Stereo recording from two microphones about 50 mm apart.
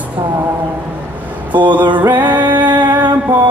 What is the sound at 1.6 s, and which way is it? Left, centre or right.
Music, right.